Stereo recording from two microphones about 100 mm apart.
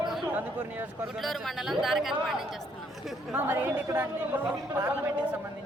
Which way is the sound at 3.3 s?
20° right (ahead or behind).